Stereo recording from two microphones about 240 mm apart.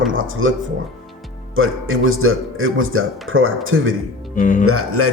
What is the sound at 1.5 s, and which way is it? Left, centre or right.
A man's voice, right.